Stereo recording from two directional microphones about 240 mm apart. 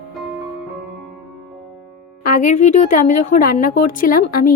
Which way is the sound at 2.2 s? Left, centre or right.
Left.